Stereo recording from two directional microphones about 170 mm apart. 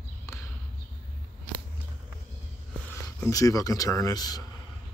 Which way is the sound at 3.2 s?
20° left (ahead or behind).